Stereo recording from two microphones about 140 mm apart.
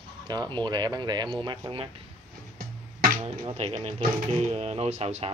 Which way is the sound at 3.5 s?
45° right (ahead or behind).